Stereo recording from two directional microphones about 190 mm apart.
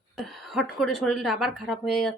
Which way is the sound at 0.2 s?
Centre (ahead or behind).